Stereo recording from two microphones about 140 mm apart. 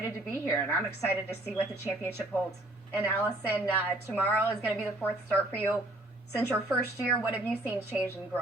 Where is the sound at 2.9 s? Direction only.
15° left (ahead or behind).